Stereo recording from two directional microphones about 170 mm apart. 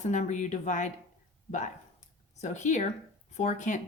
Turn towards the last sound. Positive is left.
turn(degrees=45)  # may be behind; listen again after turning